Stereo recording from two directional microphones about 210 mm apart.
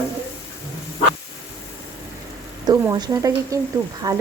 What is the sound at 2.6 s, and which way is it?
Speech, 20° right (ahead or behind).